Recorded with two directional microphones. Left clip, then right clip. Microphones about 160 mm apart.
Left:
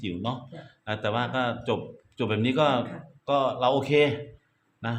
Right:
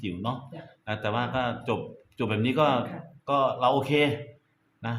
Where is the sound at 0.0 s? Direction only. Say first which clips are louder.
Left 1 dB; 20° left (ahead or behind).